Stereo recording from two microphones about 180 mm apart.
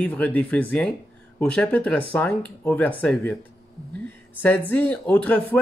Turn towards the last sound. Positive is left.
turn(degrees=10)  # may be behind; listen again after turning